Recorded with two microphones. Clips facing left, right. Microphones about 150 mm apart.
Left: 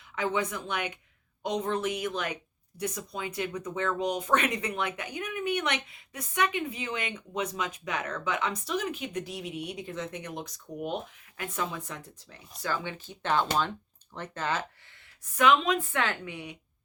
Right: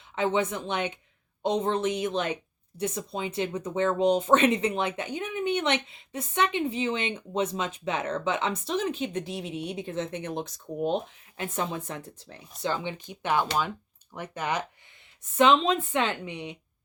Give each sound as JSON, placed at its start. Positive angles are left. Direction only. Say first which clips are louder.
{"t": 0.2, "sound": "speech", "louder": "right 4 dB", "side_deg": -25}
{"t": 15.2, "sound": "speech", "louder": "right 3 dB", "side_deg": -25}